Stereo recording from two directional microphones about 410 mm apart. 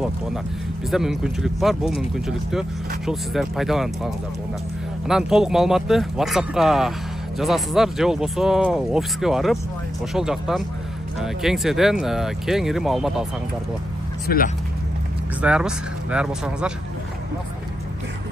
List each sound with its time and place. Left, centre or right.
0.9 s speech: centre
14.2 s speech: left
15.4 s speech: centre